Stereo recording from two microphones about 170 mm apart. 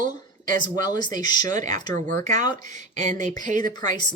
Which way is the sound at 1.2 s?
25° left (ahead or behind).